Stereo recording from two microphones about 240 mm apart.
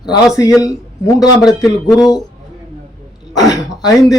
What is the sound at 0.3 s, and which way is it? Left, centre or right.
Speech, centre.